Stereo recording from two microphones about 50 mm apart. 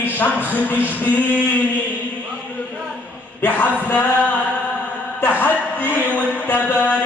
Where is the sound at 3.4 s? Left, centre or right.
Left.